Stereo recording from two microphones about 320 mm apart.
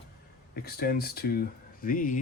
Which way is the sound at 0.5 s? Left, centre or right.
Left.